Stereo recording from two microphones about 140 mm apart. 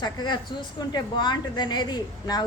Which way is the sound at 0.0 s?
30° left (ahead or behind).